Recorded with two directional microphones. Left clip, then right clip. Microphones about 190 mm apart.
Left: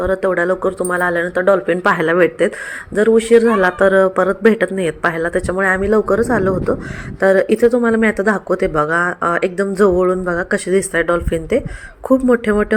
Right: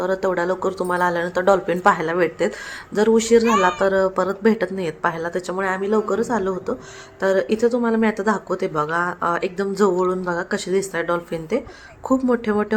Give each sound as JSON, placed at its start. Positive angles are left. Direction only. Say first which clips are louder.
{"t": 0.0, "sound": "speech", "louder": "left 5 dB", "side_deg": 10}
{"t": 1.8, "sound": "speech", "louder": "left 4 dB", "side_deg": 15}